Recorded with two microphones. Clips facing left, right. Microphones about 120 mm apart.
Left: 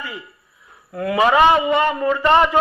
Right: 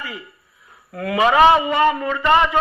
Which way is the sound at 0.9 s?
25° left (ahead or behind).